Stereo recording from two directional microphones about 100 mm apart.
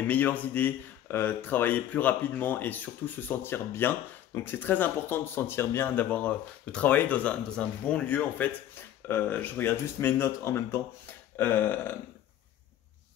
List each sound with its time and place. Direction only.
0.0 s speech: 15° left (ahead or behind)